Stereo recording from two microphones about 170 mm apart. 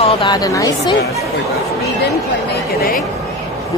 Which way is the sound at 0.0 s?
35° left (ahead or behind).